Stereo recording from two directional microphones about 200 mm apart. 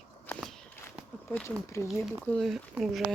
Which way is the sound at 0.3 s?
5° left (ahead or behind).